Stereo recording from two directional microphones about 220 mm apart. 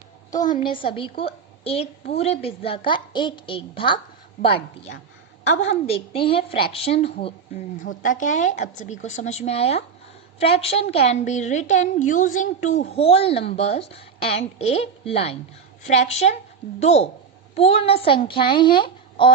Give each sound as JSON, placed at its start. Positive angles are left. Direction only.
{"t": 0.3, "sound": "a woman's voice", "side_deg": 15}